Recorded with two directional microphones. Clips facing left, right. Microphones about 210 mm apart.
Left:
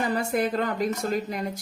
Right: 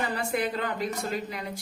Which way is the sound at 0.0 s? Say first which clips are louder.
Left 4 dB; 45° left (ahead or behind).